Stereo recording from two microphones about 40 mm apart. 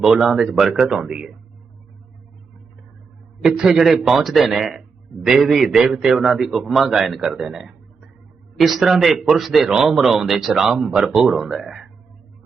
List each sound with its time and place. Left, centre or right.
0.0 s speech: centre
3.4 s a man's voice: centre